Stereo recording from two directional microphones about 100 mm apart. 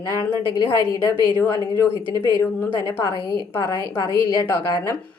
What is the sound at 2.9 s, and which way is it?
Speech, 20° left (ahead or behind).